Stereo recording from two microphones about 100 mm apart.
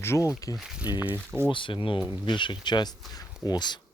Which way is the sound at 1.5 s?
55° left (ahead or behind).